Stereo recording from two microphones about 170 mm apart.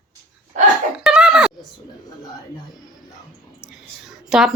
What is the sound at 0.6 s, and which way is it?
Speech, 50° right (ahead or behind).